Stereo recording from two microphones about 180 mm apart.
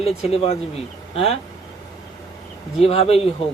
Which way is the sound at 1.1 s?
35° left (ahead or behind).